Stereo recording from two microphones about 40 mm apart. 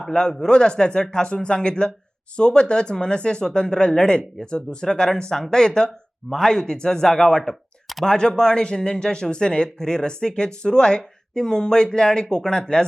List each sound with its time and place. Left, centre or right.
0.1 s speech: centre